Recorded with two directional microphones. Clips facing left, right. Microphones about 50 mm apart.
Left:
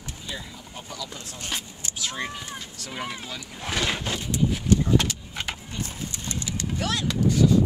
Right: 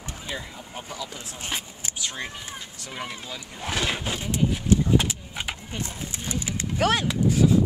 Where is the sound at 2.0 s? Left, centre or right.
Centre.